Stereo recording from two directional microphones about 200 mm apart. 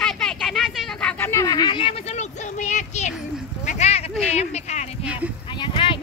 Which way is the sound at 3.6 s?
35° left (ahead or behind).